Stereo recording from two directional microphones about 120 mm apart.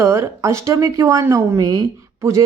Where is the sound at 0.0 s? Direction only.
25° right (ahead or behind).